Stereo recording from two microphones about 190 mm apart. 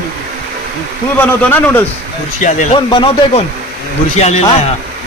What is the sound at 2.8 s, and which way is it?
A man's voice, 25° left (ahead or behind).